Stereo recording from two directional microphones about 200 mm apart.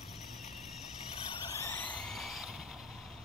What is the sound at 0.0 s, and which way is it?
Vehicle, centre (ahead or behind).